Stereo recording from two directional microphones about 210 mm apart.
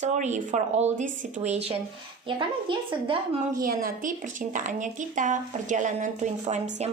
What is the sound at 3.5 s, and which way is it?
Speech, 40° right (ahead or behind).